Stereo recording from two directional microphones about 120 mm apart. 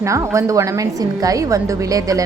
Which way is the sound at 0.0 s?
25° right (ahead or behind).